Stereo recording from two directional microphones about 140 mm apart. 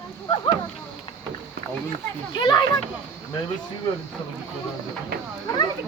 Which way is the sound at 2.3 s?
30° left (ahead or behind).